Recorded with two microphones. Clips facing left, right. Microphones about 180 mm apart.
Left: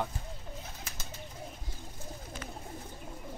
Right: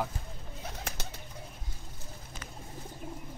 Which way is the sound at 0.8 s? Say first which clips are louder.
Right 5 dB; 65° right (ahead or behind).